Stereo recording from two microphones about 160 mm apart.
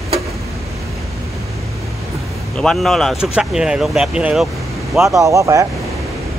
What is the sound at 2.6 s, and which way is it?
Speech, centre (ahead or behind).